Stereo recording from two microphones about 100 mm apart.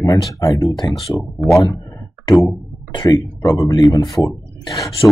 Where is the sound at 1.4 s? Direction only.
30° left (ahead or behind).